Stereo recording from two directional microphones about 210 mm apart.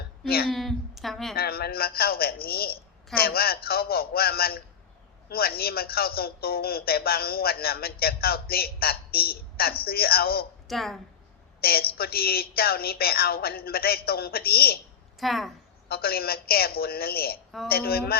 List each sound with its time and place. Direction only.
0.5 s speech: centre (ahead or behind)
1.4 s a man's voice: 45° left (ahead or behind)
10.7 s speech: centre (ahead or behind)
11.6 s a man's voice: 45° left (ahead or behind)
15.2 s speech: centre (ahead or behind)
15.9 s a man's voice: 45° left (ahead or behind)